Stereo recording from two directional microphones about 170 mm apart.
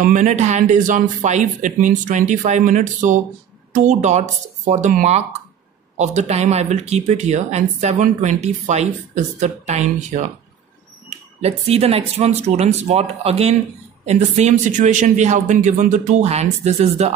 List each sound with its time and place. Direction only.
0.0 s speech: 45° right (ahead or behind)